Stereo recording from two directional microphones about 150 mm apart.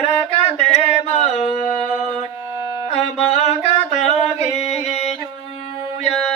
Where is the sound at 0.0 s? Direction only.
45° left (ahead or behind).